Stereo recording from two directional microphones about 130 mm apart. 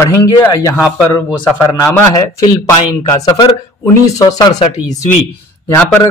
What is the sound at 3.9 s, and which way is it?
Speech, 25° left (ahead or behind).